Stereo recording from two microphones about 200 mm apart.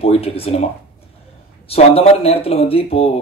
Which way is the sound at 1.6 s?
30° left (ahead or behind).